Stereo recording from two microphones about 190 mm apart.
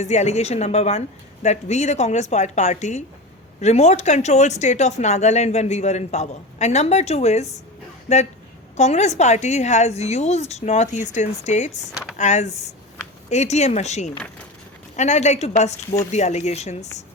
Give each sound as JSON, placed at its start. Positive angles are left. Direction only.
{"t": 0.0, "sound": "speech", "side_deg": 35}